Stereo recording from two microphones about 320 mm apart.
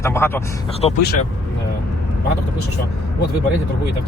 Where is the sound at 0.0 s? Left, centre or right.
Centre.